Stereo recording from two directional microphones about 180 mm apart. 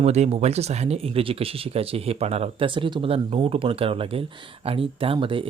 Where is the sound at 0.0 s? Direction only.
35° right (ahead or behind).